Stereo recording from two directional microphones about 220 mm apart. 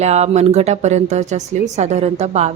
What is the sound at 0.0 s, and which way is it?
A woman's voice, 30° right (ahead or behind).